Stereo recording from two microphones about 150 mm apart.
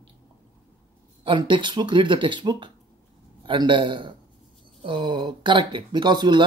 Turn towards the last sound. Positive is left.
turn(degrees=-30)  # may be behind; listen again after turning